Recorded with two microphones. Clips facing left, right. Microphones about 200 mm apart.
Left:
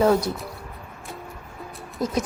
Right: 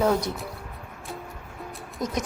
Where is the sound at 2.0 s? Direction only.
30° left (ahead or behind).